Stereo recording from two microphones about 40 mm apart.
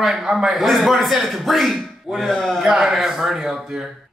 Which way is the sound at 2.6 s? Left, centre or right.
Centre.